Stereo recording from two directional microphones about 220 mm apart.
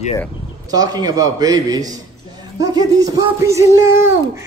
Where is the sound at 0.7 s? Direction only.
15° right (ahead or behind).